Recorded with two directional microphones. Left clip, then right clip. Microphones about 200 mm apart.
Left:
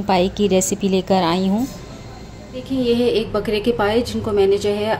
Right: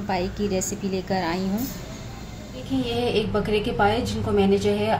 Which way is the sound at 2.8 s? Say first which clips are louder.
Left 7 dB; 45° left (ahead or behind).